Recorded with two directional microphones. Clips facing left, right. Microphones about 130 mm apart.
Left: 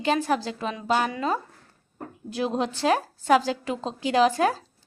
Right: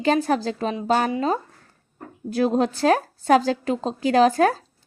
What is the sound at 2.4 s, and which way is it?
A woman's voice, 45° right (ahead or behind).